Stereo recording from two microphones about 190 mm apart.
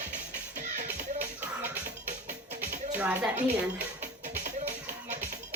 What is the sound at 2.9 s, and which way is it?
Speech, 5° right (ahead or behind).